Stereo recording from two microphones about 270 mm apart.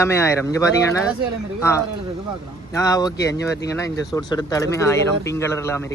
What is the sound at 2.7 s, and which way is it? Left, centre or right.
Speech, centre.